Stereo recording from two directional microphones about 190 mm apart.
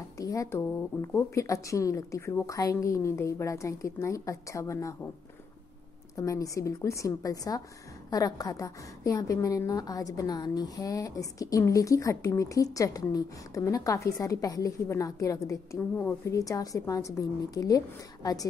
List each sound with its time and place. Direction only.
0.2 s speech: 15° left (ahead or behind)
6.1 s speech: 15° left (ahead or behind)